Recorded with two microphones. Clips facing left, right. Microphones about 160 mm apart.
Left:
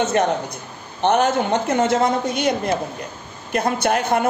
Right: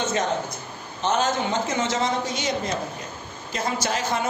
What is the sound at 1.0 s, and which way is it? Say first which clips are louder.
A woman's voice: left 6 dB; 60° left (ahead or behind).